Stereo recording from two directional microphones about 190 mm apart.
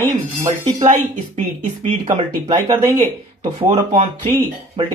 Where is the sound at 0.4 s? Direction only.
30° right (ahead or behind).